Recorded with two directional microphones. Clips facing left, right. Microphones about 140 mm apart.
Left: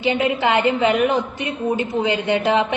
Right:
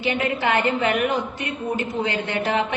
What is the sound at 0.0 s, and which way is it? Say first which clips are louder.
A woman's voice: left 4 dB; 20° left (ahead or behind).